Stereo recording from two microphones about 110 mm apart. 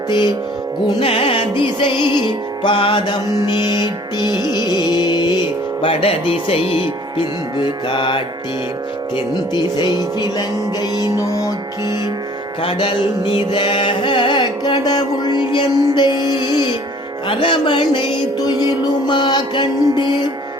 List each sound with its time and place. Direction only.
0.1 s music: 45° left (ahead or behind)
1.0 s music: 55° left (ahead or behind)
4.3 s music: 30° right (ahead or behind)
4.5 s speech: 40° left (ahead or behind)
5.8 s music: 60° left (ahead or behind)
9.1 s speech: 45° left (ahead or behind)
13.5 s music: 50° left (ahead or behind)
17.2 s music: 50° left (ahead or behind)